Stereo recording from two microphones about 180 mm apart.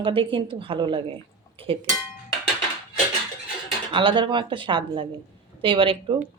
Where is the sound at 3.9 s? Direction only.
25° right (ahead or behind).